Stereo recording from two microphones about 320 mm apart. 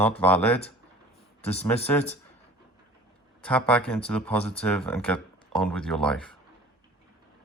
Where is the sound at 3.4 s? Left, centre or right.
Centre.